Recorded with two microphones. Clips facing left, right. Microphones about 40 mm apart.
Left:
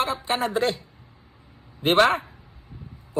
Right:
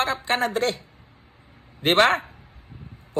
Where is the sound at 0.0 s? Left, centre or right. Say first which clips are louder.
Right 1 dB; right.